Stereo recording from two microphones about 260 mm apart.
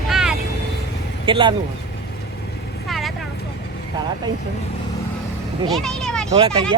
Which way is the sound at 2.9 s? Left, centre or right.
Centre.